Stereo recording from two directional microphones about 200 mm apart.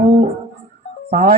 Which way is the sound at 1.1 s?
40° right (ahead or behind).